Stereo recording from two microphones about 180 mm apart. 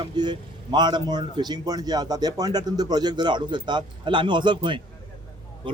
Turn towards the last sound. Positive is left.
turn(degrees=-25)  # may be behind; listen again after turning